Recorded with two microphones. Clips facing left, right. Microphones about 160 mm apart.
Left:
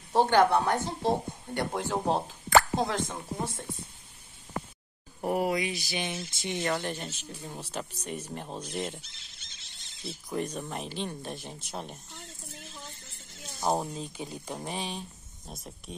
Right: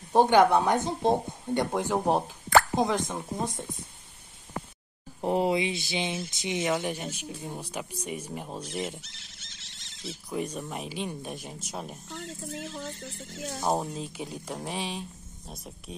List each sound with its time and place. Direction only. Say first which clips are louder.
0.1 s speech: right 3 dB; 15° right (ahead or behind)
5.2 s speech: right 3 dB; 25° right (ahead or behind); by 9.0 s 5° right (ahead or behind)
9.0 s wild animals: right 3 dB; 70° right (ahead or behind)
10.3 s speech: even; 5° right (ahead or behind)
12.1 s speech: right 10 dB; 80° right
13.6 s speech: even; centre (ahead or behind)